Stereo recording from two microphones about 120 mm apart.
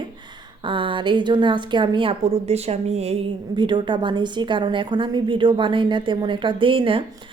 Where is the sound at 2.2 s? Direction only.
60° right (ahead or behind).